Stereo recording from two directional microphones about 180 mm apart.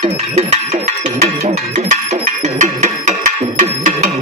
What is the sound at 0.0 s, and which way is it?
Music, 35° right (ahead or behind).